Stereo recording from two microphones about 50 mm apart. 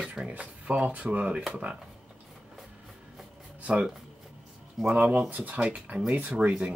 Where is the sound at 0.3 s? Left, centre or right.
Right.